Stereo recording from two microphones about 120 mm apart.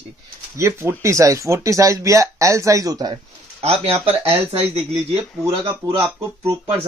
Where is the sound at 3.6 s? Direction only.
55° right (ahead or behind).